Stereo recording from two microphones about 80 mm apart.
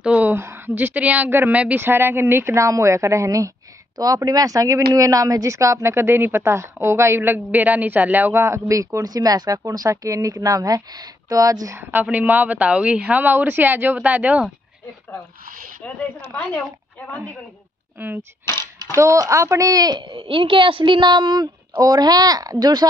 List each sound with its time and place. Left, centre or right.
0.0 s a sound: centre
0.3 s a woman's voice: right
8.4 s a woman's voice: right
11.7 s speech: right
17.9 s speech: right
18.6 s speech: right
21.7 s a woman's voice: right